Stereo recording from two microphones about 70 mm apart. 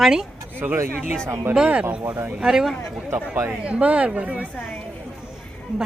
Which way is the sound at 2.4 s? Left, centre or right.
Centre.